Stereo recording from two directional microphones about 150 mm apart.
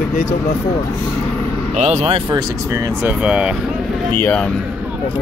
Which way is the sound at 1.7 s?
45° right (ahead or behind).